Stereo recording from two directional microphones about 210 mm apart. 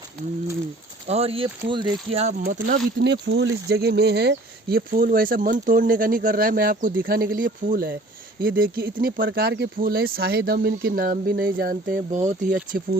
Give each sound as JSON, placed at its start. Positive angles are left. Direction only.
{"t": 1.0, "sound": "speech", "side_deg": -30}
{"t": 2.4, "sound": "speech", "side_deg": -45}